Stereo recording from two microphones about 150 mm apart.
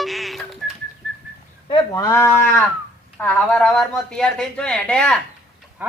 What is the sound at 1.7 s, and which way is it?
Speech, 30° left (ahead or behind).